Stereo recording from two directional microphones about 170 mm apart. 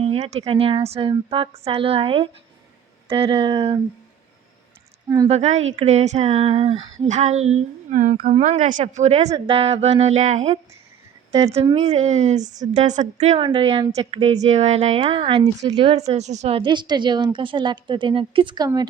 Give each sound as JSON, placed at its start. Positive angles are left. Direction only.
{"t": 0.0, "sound": "speech", "side_deg": -35}
{"t": 5.0, "sound": "speech", "side_deg": -20}
{"t": 5.3, "sound": "speech", "side_deg": -40}
{"t": 13.4, "sound": "a woman's voice", "side_deg": -30}